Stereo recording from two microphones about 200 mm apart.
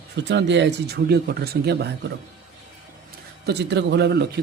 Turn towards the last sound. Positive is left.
turn(degrees=-55)  # may be behind; listen again after turning